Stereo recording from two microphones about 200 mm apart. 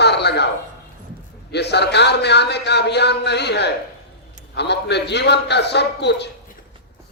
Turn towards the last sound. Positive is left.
turn(degrees=60)  # may be behind; listen again after turning